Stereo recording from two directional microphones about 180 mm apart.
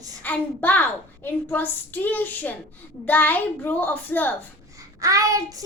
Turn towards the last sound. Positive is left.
turn(degrees=-20)  # may be behind; listen again after turning